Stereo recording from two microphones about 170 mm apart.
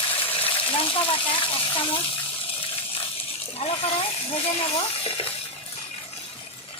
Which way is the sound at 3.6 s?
35° left (ahead or behind).